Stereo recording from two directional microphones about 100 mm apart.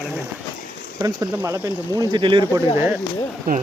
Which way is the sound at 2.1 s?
55° right (ahead or behind).